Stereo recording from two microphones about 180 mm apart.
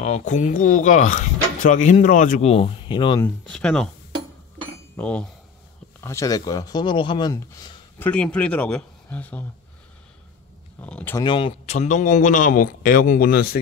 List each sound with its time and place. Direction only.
0.0 s speech: 40° left (ahead or behind)
3.2 s speech: 5° left (ahead or behind)
4.9 s speech: 5° left (ahead or behind)
8.1 s speech: 5° left (ahead or behind)
10.8 s speech: 10° left (ahead or behind)
11.1 s speech: 30° left (ahead or behind); by 13.6 s 55° left (ahead or behind)